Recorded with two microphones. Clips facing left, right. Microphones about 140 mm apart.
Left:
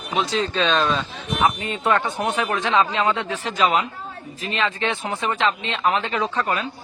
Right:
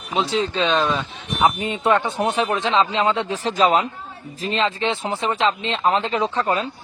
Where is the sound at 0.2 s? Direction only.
25° right (ahead or behind).